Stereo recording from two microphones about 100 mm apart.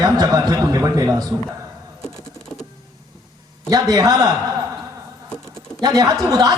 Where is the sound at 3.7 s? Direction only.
40° right (ahead or behind).